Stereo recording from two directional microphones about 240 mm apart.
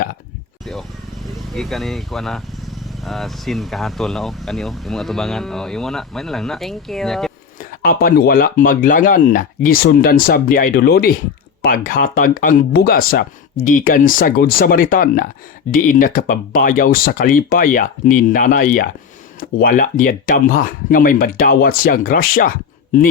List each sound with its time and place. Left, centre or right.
1.5 s speech: centre
7.6 s speech: left